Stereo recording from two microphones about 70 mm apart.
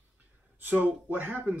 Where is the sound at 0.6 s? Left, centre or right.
Right.